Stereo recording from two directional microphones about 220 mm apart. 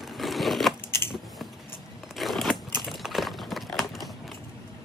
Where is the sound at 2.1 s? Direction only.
Centre (ahead or behind).